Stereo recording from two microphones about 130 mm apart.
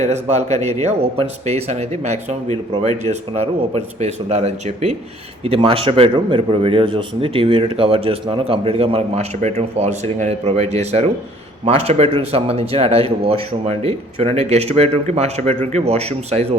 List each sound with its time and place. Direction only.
0.0 s speech: 60° right (ahead or behind)
5.5 s a man's voice: 45° right (ahead or behind)